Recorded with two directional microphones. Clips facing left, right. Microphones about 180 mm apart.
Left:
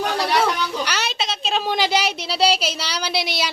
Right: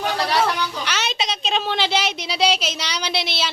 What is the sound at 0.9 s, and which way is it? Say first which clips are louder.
A woman's voice: even; 5° left (ahead or behind).